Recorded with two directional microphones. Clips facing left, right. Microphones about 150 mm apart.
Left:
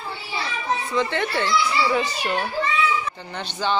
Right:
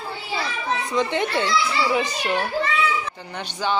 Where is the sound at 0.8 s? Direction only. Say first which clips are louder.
Right 3 dB; 15° right (ahead or behind).